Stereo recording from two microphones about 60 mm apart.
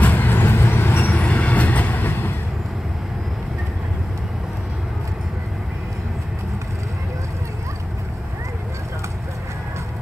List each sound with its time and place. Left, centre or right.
0.0 s vehicle: left
1.2 s train: left